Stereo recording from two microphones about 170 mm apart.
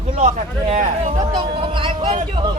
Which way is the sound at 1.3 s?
30° right (ahead or behind).